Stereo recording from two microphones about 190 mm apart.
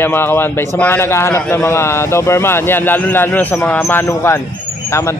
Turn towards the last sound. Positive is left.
turn(degrees=15)  # may be behind; listen again after turning